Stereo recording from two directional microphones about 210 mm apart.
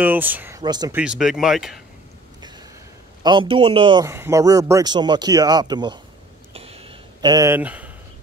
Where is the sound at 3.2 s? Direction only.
25° right (ahead or behind).